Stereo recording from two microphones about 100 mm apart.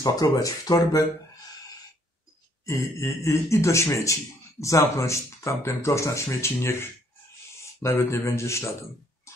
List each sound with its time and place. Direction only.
0.0 s speech: 35° left (ahead or behind)
2.6 s speech: 30° left (ahead or behind)